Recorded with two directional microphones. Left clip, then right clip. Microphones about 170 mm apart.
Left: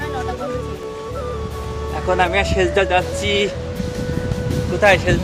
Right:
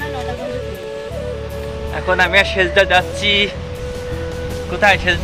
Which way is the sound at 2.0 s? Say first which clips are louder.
Right 4 dB; 15° left (ahead or behind).